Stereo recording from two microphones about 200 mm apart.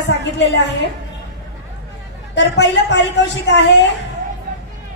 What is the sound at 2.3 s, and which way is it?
A woman's voice, 60° left (ahead or behind).